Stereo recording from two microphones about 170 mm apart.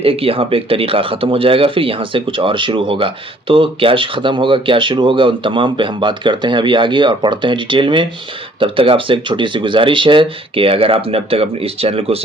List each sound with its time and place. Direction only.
0.0 s speech: 35° right (ahead or behind)